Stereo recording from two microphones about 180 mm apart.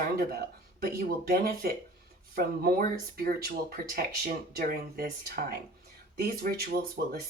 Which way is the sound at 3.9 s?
55° right (ahead or behind).